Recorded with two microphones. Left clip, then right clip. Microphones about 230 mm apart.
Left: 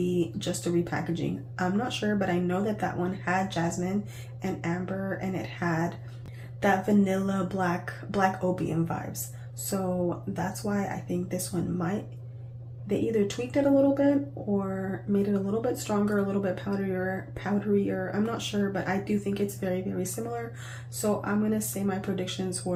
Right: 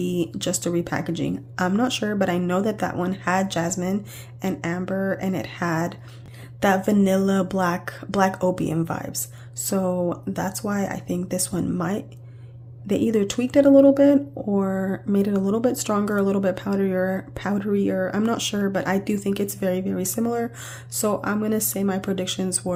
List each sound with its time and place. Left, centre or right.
0.3 s speech: right